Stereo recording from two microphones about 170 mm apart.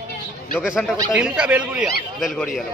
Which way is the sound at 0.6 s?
5° right (ahead or behind).